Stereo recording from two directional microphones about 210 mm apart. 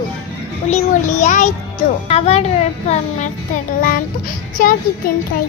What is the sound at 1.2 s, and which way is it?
A child's voice, 35° left (ahead or behind).